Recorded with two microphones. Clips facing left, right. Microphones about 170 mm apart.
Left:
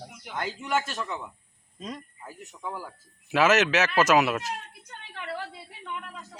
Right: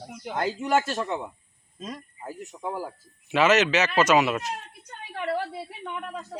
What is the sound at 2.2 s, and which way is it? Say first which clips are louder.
Speech: right 5 dB; 40° right (ahead or behind).